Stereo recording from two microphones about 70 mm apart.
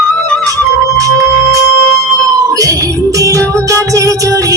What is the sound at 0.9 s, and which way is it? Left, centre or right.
Music, right.